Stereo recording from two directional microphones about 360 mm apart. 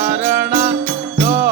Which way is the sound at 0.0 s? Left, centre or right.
Right.